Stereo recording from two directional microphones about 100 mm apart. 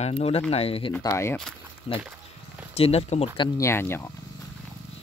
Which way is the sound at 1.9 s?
70° left (ahead or behind).